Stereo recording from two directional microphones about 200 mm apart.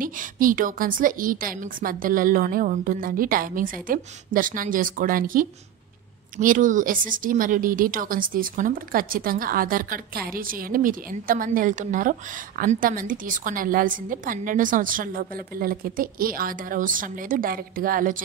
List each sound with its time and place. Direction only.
0.0 s speech: 45° right (ahead or behind)